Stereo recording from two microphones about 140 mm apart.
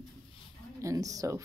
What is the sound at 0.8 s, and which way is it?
Speech, 25° right (ahead or behind).